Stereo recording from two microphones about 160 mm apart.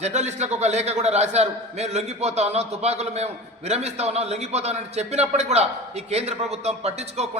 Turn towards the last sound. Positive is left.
turn(degrees=-40)  # may be behind; listen again after turning